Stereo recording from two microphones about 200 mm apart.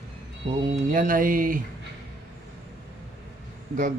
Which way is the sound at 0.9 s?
45° right (ahead or behind).